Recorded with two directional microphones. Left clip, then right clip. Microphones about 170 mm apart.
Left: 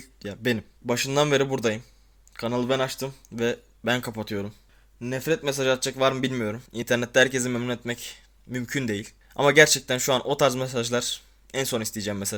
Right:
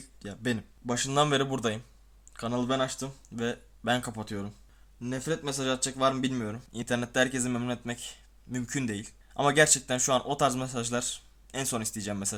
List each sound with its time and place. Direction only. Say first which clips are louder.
0.0 s speech: left 6 dB; 15° left (ahead or behind)